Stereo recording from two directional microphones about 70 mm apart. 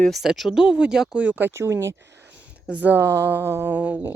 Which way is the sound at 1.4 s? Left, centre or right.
Right.